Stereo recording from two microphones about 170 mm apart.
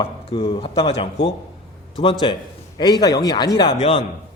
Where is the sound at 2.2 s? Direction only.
30° left (ahead or behind).